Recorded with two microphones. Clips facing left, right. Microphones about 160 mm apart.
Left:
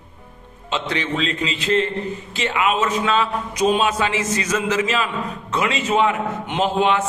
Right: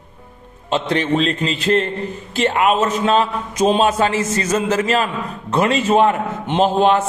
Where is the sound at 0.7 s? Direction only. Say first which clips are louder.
Right 6 dB; 50° right (ahead or behind).